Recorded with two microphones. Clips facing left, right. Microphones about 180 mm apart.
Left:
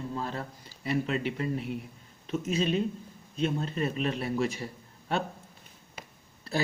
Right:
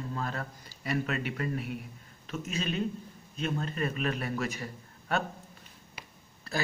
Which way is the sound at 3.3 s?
30° left (ahead or behind).